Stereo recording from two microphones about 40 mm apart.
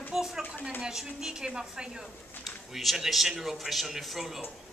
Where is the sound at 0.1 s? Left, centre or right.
Centre.